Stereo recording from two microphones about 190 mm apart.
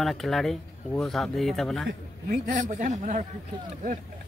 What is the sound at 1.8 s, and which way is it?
A man's voice, 45° right (ahead or behind).